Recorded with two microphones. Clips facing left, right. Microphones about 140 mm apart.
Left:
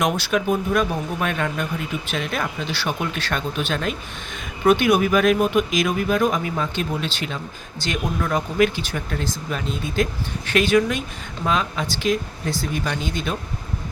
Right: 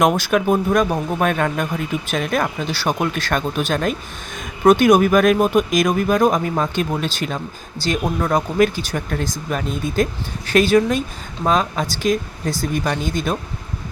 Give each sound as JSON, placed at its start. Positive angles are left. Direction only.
{"t": 0.0, "sound": "speech", "side_deg": -45}